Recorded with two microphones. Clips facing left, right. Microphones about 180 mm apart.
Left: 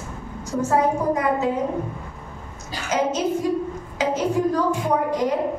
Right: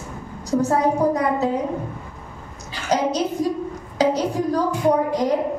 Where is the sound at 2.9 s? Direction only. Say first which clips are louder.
Right 1 dB; 35° right (ahead or behind).